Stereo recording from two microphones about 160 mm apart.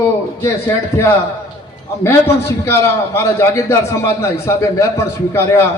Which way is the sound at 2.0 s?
15° left (ahead or behind).